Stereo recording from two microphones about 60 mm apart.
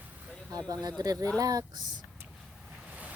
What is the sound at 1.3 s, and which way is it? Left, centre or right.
Speech, right.